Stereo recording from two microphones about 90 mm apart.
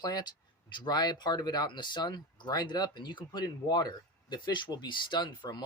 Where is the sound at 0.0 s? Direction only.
45° left (ahead or behind).